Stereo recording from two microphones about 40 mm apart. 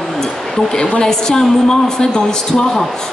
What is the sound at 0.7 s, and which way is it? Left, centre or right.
A woman's voice, centre.